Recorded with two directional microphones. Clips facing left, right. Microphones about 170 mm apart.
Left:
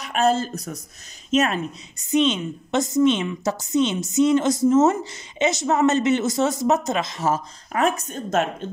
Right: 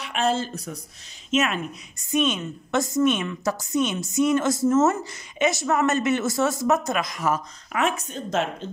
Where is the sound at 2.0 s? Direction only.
20° left (ahead or behind).